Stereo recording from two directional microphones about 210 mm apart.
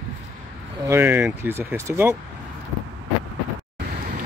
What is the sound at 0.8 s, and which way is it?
Speech, 10° right (ahead or behind).